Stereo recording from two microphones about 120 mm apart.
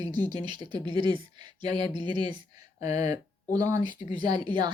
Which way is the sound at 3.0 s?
30° right (ahead or behind).